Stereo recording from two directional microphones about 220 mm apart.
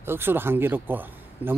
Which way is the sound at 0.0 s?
10° right (ahead or behind).